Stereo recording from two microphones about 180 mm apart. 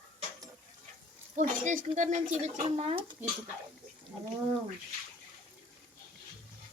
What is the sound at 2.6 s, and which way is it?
Speech, 30° right (ahead or behind).